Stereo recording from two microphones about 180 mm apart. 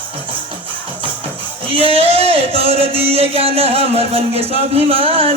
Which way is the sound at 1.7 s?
30° right (ahead or behind).